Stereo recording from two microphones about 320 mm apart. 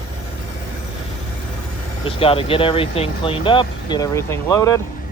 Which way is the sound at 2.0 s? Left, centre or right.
Centre.